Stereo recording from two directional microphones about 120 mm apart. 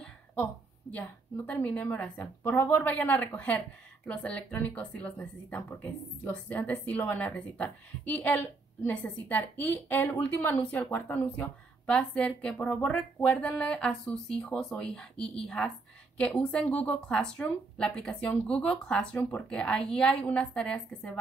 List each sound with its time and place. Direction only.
0.9 s a woman's voice: 15° left (ahead or behind)